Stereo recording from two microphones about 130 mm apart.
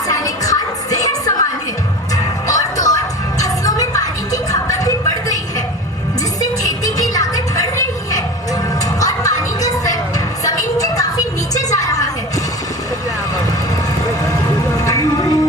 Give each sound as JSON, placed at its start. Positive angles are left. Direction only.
{"t": 0.1, "sound": "music", "side_deg": 25}
{"t": 6.4, "sound": "music", "side_deg": 25}
{"t": 10.8, "sound": "music", "side_deg": 30}
{"t": 14.8, "sound": "music", "side_deg": 25}